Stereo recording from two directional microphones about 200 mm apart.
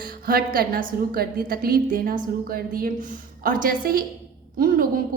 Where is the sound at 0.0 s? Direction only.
45° right (ahead or behind).